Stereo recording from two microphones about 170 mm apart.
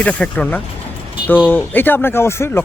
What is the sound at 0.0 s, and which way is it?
Speech, 10° left (ahead or behind).